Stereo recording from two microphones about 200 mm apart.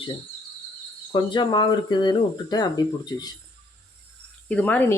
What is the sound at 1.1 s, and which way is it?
Speech, 25° left (ahead or behind).